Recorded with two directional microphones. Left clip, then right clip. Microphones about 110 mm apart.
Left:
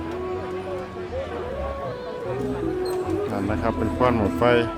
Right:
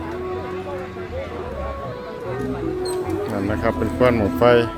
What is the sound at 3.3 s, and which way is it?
Speech, 5° right (ahead or behind).